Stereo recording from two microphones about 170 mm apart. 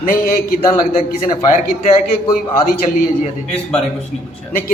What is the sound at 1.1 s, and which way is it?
A man's voice, 60° left (ahead or behind).